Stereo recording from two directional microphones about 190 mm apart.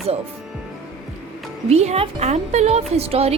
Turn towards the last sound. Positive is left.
turn(degrees=-30)  # may be behind; listen again after turning